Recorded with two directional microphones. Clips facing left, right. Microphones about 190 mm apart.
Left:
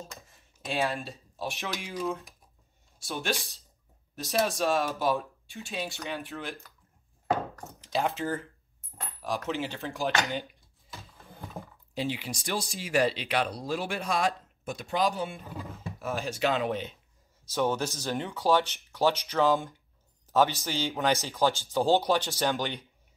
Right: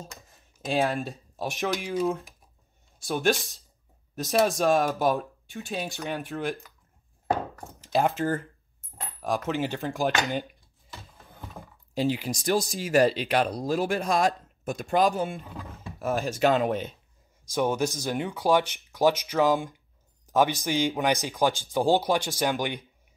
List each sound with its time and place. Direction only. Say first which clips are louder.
0.3 s a sound: right 6 dB; 40° right (ahead or behind)
1.6 s speech: right 8 dB; 45° right (ahead or behind)
3.1 s speech: right 7 dB; 50° right (ahead or behind)
8.2 s speech: right 4 dB; 45° right (ahead or behind)
9.5 s speech: right 4 dB; 50° right (ahead or behind)
11.9 s speech: right 6 dB; 40° right (ahead or behind)
17.5 s speech: right 3 dB; 10° right (ahead or behind)